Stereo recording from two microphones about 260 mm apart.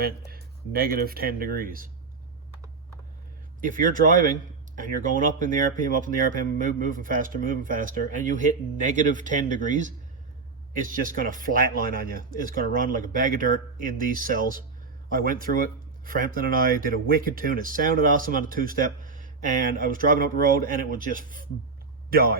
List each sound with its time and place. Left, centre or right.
0.0 s speech: right
3.6 s speech: right